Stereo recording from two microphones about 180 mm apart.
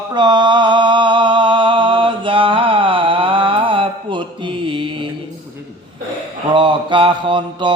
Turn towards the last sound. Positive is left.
turn(degrees=-25)  # may be behind; listen again after turning